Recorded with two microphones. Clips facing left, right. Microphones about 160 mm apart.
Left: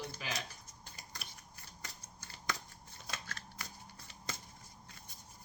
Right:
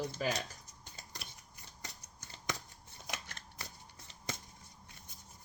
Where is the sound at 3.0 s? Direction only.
20° right (ahead or behind).